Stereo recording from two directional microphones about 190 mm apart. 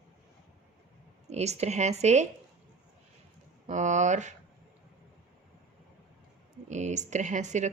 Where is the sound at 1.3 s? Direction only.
35° right (ahead or behind).